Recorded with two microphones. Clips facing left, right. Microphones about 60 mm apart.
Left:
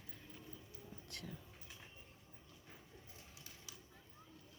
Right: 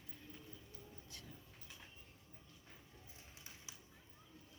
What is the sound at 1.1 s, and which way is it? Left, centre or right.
Speech, left.